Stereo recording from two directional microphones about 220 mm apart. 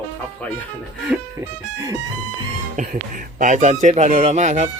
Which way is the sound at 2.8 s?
35° right (ahead or behind).